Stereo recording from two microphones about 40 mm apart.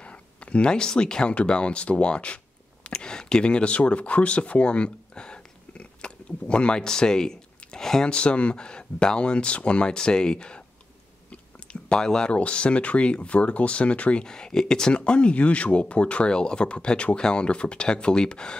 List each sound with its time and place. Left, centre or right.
0.0 s a sound: left
1.3 s speech: left
8.1 s speech: left
11.9 s speech: centre
12.3 s speech: left
14.2 s speech: centre